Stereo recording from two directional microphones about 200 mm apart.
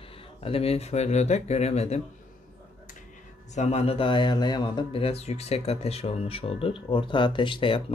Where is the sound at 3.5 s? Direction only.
30° left (ahead or behind).